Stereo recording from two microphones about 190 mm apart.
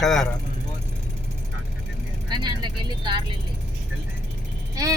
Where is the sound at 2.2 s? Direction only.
25° right (ahead or behind).